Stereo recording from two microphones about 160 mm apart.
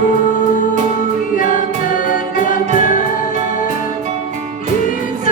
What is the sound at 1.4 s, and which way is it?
Music, 55° left (ahead or behind).